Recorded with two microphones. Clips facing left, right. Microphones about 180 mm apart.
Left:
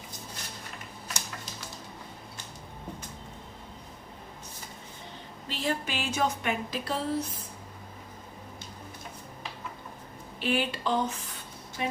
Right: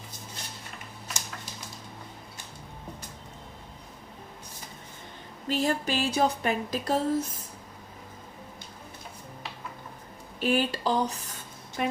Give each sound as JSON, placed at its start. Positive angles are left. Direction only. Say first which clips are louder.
{"t": 5.5, "sound": "speech", "louder": "right 5 dB", "side_deg": -45}
{"t": 10.4, "sound": "speech", "louder": "right 3 dB", "side_deg": -40}
{"t": 11.8, "sound": "speech", "louder": "right 3 dB", "side_deg": -55}